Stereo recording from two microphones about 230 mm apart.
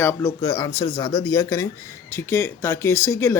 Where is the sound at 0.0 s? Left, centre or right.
Centre.